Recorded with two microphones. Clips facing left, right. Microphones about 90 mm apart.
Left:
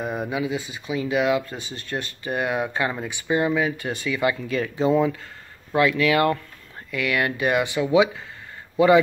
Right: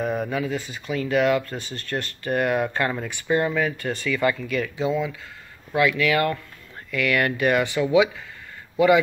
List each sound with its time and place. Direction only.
0.0 s speech: 10° left (ahead or behind)
4.6 s speech: 40° left (ahead or behind)
5.7 s a man's voice: 30° left (ahead or behind)